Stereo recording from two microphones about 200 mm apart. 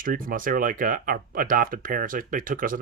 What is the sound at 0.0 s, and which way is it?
Speech, 45° right (ahead or behind).